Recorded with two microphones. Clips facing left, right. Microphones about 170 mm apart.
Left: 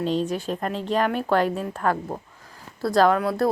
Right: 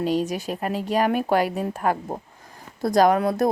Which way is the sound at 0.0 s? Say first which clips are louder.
Right 1 dB; 10° right (ahead or behind).